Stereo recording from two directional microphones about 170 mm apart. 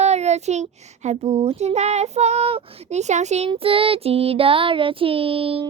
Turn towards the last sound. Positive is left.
turn(degrees=-35)  # may be behind; listen again after turning